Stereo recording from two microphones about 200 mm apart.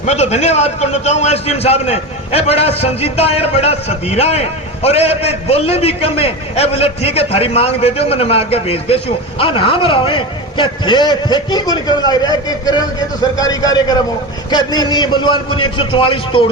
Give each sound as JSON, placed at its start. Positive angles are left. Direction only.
{"t": 0.0, "sound": "a man's voice", "side_deg": 35}